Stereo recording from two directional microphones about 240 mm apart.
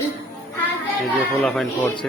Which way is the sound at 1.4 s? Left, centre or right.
Centre.